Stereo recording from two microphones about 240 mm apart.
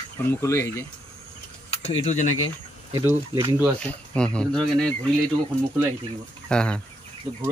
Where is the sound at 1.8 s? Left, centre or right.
Left.